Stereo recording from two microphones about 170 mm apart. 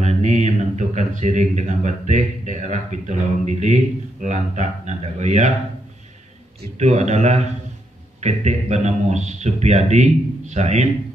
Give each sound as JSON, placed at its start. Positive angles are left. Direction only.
{"t": 0.0, "sound": "speech", "side_deg": -40}
{"t": 6.8, "sound": "speech", "side_deg": -40}